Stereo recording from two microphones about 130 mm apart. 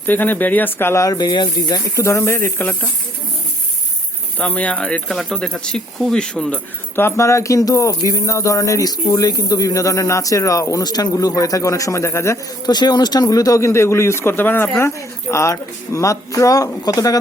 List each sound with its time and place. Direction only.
0.0 s speech: 15° left (ahead or behind)
4.4 s speech: 10° left (ahead or behind)
6.9 s speech: 20° left (ahead or behind)